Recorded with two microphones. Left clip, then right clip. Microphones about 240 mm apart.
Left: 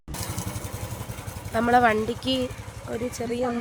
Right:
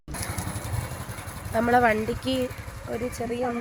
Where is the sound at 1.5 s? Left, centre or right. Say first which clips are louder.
Left 1 dB; centre.